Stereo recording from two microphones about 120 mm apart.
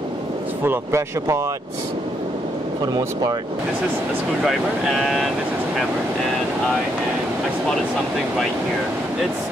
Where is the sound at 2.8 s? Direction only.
35° right (ahead or behind).